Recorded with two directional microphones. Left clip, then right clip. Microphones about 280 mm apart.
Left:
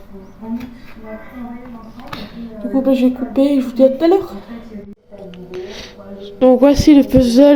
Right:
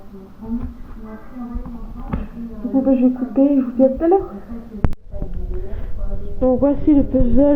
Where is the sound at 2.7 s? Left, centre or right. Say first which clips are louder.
Left 2 dB; left.